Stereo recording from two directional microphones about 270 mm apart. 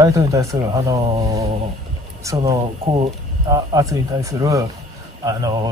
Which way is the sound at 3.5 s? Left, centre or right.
Centre.